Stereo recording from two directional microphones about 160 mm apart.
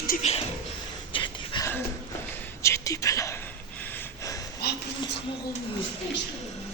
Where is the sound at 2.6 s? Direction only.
20° left (ahead or behind).